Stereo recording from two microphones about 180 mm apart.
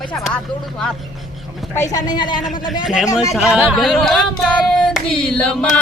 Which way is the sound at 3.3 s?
5° right (ahead or behind).